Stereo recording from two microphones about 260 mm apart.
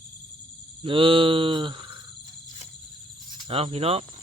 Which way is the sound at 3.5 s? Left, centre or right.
Right.